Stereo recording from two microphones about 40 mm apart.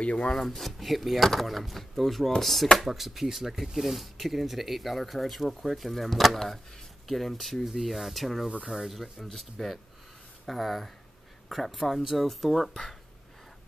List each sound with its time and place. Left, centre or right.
0.0 s speech: left
0.3 s speech: centre